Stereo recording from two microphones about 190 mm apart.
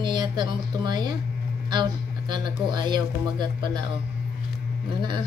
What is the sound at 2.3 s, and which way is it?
Speech, 25° right (ahead or behind).